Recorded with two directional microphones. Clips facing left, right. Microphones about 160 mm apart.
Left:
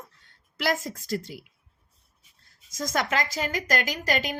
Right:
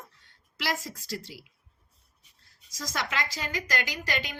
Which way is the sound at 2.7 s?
50° left (ahead or behind).